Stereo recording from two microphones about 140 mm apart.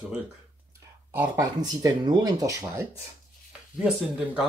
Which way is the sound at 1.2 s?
25° right (ahead or behind).